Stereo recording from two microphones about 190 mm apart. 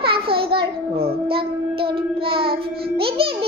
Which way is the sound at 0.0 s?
30° right (ahead or behind).